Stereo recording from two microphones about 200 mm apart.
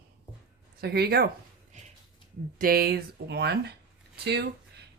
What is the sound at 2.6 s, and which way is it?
Speech, 50° right (ahead or behind).